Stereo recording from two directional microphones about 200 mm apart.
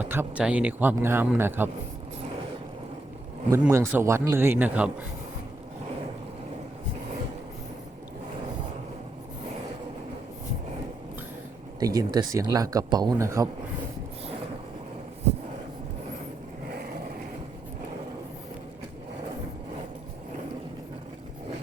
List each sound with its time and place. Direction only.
0.0 s speech: 10° right (ahead or behind)
3.5 s speech: 15° right (ahead or behind)
11.8 s speech: 20° right (ahead or behind)